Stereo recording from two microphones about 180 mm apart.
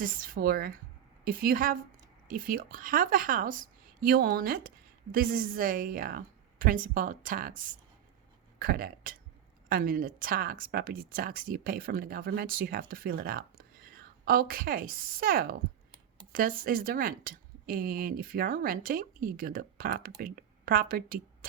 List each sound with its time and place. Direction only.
0.0 s a woman's voice: 55° right (ahead or behind)